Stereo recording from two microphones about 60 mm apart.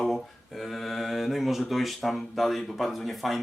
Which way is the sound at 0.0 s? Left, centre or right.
Centre.